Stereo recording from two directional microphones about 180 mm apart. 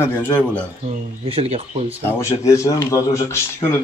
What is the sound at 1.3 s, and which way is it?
Speech, 35° right (ahead or behind).